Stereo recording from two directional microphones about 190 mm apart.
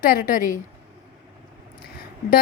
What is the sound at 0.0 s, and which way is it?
Speech, 45° left (ahead or behind).